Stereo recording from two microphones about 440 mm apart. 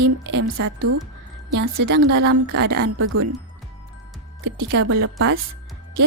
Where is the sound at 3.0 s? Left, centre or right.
Right.